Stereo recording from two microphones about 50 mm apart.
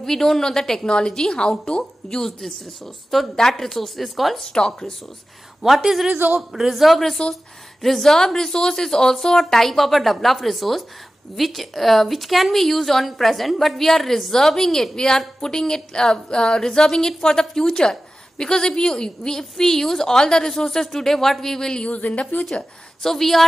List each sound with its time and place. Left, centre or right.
0.0 s a woman's voice: centre
4.5 s a woman's voice: centre
5.6 s a woman's voice: centre
21.8 s speech: left
23.0 s a woman's voice: centre